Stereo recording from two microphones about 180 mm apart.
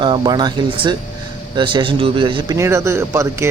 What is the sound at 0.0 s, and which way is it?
Speech, 25° right (ahead or behind).